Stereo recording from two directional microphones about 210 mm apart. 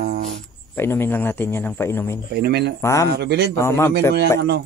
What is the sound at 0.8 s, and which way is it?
A man's voice, 10° left (ahead or behind).